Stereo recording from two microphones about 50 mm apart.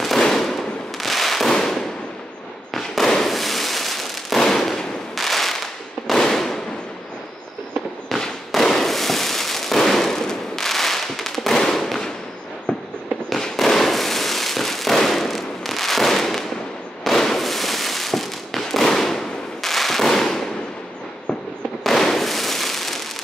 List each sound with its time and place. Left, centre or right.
0.0 s fireworks: centre
8.1 s fireworks: centre
13.3 s fireworks: centre
21.8 s fireworks: centre